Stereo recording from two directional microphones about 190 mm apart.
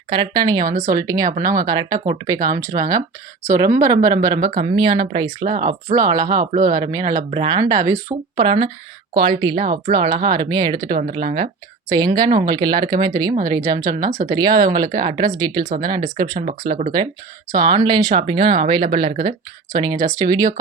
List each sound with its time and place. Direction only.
0.1 s speech: 25° right (ahead or behind)
6.5 s speech: 45° right (ahead or behind)
6.9 s speech: 20° right (ahead or behind)
7.6 s speech: 15° right (ahead or behind)